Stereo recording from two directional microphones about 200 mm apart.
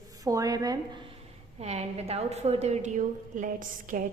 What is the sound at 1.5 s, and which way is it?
A woman's voice, 30° right (ahead or behind).